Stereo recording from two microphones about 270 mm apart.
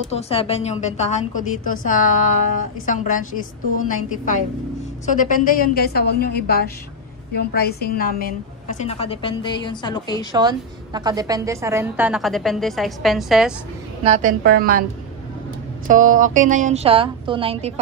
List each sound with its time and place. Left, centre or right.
0.1 s a woman's voice: left
10.3 s a woman's voice: centre
14.0 s a woman's voice: right
15.9 s a woman's voice: right